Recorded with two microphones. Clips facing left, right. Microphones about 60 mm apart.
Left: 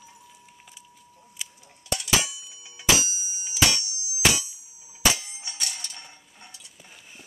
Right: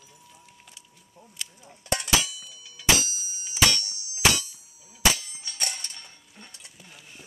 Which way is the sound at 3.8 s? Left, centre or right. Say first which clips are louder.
Left 2 dB; right.